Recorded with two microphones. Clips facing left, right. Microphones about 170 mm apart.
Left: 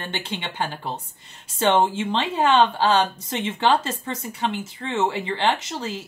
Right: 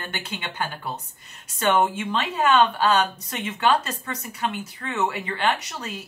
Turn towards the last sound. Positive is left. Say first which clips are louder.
# left 4 dB
turn(degrees=25)  # may be behind; listen again after turning